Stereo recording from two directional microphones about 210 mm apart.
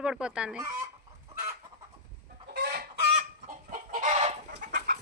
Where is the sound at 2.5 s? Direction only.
50° right (ahead or behind).